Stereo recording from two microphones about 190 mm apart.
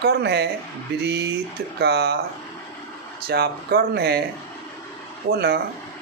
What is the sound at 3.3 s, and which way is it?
Speech, 60° right (ahead or behind).